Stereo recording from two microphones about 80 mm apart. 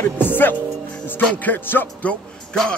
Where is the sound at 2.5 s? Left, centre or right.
Centre.